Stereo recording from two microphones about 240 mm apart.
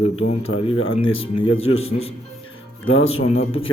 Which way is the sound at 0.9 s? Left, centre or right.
Left.